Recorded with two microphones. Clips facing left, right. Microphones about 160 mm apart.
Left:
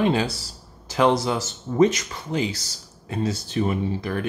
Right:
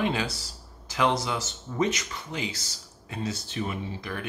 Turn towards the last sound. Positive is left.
turn(degrees=40)  # may be behind; listen again after turning